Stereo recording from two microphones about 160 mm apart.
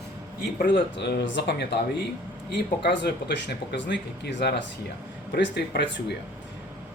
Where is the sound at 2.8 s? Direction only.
90° left.